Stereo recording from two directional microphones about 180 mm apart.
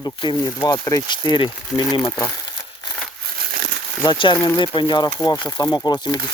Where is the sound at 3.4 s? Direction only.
60° right (ahead or behind).